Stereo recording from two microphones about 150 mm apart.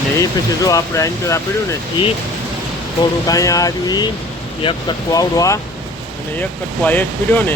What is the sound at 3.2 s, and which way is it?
Speech, 25° left (ahead or behind).